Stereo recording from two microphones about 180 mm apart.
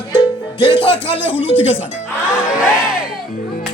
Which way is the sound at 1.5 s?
90° left.